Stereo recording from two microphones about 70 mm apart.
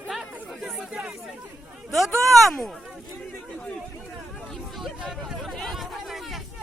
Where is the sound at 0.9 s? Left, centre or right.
Centre.